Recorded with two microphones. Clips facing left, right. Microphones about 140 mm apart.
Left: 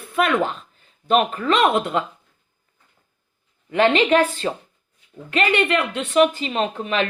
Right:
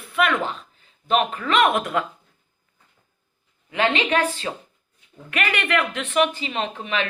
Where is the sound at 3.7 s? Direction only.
45° left (ahead or behind).